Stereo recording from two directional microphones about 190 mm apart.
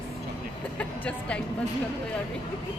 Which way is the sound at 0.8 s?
5° left (ahead or behind).